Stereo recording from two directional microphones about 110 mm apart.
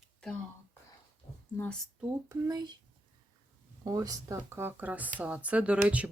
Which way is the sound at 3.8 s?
35° right (ahead or behind).